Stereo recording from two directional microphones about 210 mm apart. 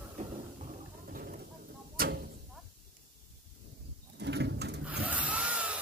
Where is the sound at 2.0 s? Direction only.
45° right (ahead or behind).